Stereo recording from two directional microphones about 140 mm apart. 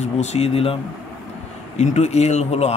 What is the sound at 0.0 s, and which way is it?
Speech, 50° left (ahead or behind).